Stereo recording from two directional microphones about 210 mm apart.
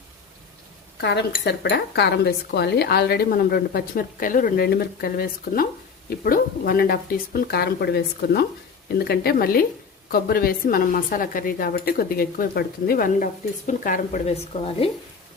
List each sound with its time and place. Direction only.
1.0 s speech: 55° left (ahead or behind); by 14.7 s 30° left (ahead or behind)